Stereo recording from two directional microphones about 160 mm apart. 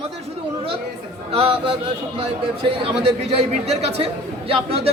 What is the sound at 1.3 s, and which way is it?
Speech, 35° right (ahead or behind).